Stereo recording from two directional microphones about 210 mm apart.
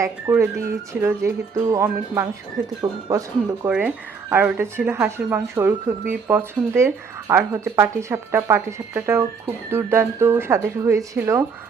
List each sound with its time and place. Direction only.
0.0 s speech: 10° right (ahead or behind)